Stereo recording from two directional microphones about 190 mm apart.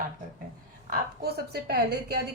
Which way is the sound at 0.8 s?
55° right (ahead or behind).